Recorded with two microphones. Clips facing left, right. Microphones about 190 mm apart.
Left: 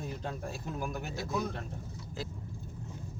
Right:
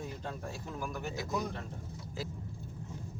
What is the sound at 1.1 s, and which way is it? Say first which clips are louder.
Speech: left 1 dB; 15° right (ahead or behind).